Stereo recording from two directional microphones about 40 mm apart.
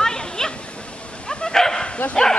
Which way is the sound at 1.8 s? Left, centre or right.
Left.